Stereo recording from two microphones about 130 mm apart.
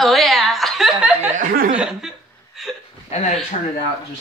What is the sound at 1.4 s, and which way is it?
Chuckle, 90° right.